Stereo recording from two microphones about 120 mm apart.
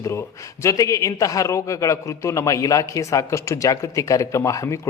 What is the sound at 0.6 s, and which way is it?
A man's voice, 25° left (ahead or behind).